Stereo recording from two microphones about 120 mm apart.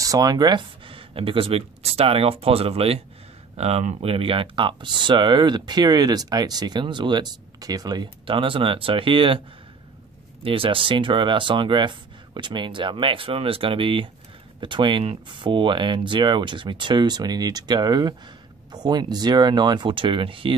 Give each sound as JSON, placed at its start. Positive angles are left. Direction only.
{"t": 0.0, "sound": "speech", "side_deg": -30}
{"t": 8.3, "sound": "speech", "side_deg": -45}
{"t": 10.4, "sound": "speech", "side_deg": -50}